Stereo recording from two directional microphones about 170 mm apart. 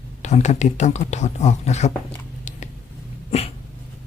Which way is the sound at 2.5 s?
45° left (ahead or behind).